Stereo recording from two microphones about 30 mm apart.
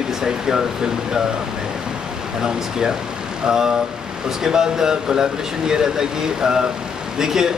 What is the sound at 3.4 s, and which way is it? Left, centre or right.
Speech, centre.